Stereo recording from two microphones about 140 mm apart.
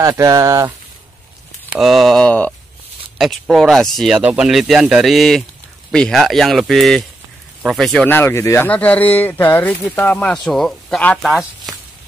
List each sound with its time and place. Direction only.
0.0 s speech: 25° right (ahead or behind)
1.7 s speech: centre (ahead or behind)
3.2 s speech: centre (ahead or behind)